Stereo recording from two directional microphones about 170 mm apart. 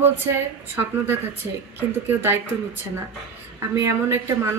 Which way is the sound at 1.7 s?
10° right (ahead or behind).